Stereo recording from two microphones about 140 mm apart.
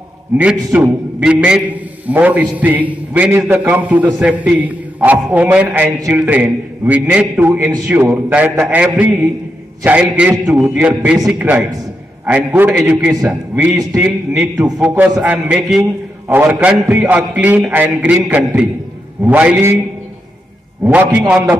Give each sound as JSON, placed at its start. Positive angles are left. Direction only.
{"t": 0.7, "sound": "a man's voice", "side_deg": -10}
{"t": 15.8, "sound": "a man's voice", "side_deg": -15}
{"t": 20.8, "sound": "a man's voice", "side_deg": -15}